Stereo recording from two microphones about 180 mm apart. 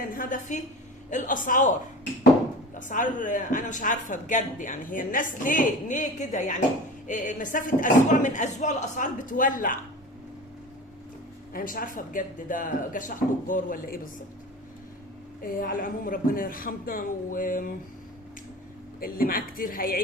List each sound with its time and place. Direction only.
0.2 s speech: 45° left (ahead or behind)
2.7 s speech: 45° left (ahead or behind)
11.5 s speech: 50° left (ahead or behind)
15.4 s speech: 50° left (ahead or behind)
18.9 s speech: 55° left (ahead or behind)